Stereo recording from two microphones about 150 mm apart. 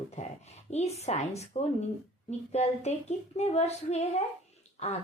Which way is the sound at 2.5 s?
45° left (ahead or behind).